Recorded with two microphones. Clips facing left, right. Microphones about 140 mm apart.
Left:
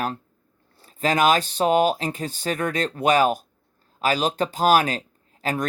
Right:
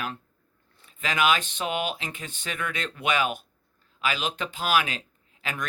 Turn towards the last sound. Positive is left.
turn(degrees=40)  # may be behind; listen again after turning